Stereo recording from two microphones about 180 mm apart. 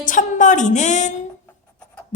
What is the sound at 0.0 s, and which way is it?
Music, 45° left (ahead or behind).